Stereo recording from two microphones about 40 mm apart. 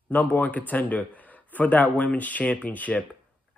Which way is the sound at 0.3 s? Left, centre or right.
Left.